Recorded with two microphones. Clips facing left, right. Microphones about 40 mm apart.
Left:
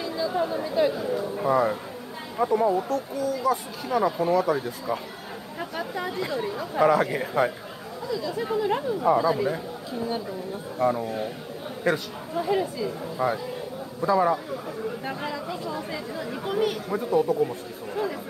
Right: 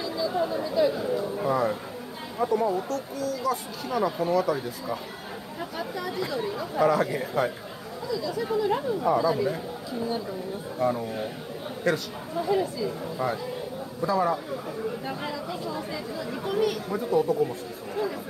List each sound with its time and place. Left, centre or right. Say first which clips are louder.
0.3 s chatter: left 1 dB; centre
1.4 s speech: left 5 dB; centre
5.6 s speech: left 2 dB; left
10.8 s speech: left 2 dB; centre
12.4 s speech: even; left
16.4 s speech: even; centre